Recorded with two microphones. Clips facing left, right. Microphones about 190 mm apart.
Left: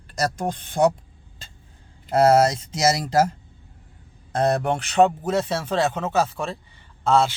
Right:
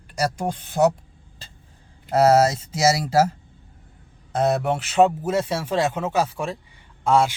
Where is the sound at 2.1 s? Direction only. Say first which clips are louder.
Even; 5° right (ahead or behind).